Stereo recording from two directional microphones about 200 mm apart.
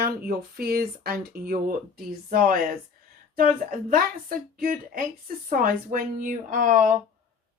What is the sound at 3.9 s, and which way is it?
Speech, 45° right (ahead or behind).